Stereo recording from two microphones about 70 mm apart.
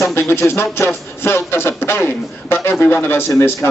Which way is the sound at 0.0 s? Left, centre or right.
Left.